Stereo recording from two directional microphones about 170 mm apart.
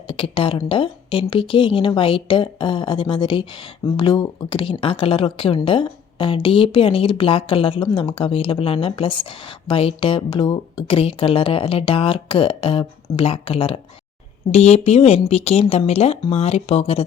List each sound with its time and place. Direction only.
0.1 s a woman's voice: 30° left (ahead or behind)